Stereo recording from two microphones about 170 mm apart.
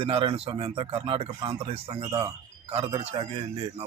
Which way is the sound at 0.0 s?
35° right (ahead or behind).